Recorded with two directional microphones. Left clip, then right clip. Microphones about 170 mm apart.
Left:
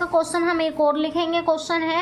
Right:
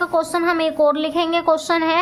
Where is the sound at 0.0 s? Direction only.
20° right (ahead or behind).